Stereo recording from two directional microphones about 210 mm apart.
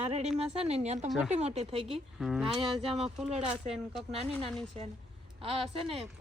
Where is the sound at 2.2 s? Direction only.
Centre (ahead or behind).